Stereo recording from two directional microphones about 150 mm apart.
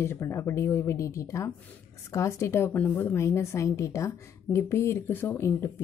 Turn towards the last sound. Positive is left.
turn(degrees=15)  # may be behind; listen again after turning